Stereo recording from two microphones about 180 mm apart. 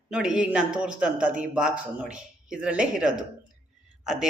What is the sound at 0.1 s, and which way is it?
Speech, 5° right (ahead or behind).